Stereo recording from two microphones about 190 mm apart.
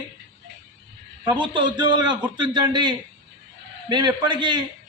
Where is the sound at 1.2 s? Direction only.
25° right (ahead or behind).